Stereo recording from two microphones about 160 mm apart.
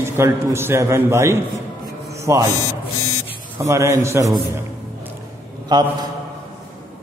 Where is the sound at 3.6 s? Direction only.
20° right (ahead or behind).